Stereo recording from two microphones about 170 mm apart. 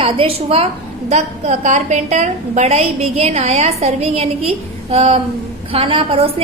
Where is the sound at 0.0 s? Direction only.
35° right (ahead or behind).